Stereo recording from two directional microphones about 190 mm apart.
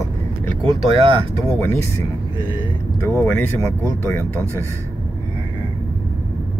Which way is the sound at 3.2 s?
10° left (ahead or behind).